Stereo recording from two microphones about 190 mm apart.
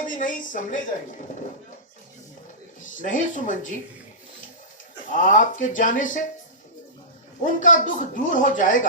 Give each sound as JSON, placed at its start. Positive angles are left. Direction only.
{"t": 0.0, "sound": "speech", "side_deg": 45}
{"t": 3.0, "sound": "speech", "side_deg": 40}
{"t": 5.1, "sound": "speech", "side_deg": 45}
{"t": 7.4, "sound": "speech", "side_deg": 45}